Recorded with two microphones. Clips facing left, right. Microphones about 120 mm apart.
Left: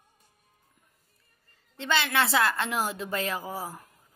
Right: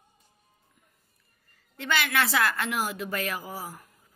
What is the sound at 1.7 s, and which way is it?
A woman's voice, 25° left (ahead or behind).